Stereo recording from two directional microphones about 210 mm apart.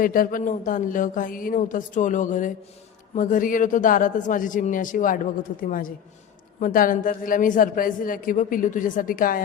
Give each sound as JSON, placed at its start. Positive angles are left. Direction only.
{"t": 0.0, "sound": "a man's voice", "side_deg": 40}